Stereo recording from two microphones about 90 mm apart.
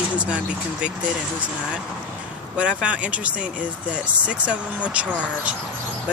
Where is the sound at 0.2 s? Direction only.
10° right (ahead or behind).